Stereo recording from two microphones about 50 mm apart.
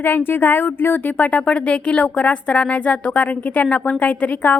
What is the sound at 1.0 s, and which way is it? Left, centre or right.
A woman's voice, left.